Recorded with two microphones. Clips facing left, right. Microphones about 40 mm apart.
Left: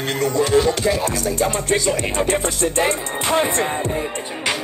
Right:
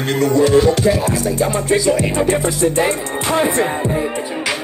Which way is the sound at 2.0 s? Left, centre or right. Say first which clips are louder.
Right 4 dB; left.